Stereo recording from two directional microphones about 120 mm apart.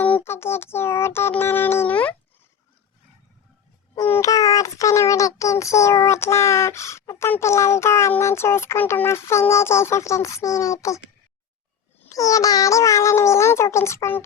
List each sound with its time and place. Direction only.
0.2 s child singing: 20° left (ahead or behind)
4.0 s child singing: 25° left (ahead or behind)
12.0 s child singing: 30° left (ahead or behind)